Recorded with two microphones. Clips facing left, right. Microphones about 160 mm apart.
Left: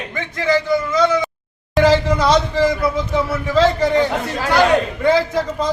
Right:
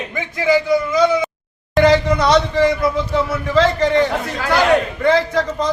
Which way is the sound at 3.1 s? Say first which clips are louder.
Even; 10° left (ahead or behind).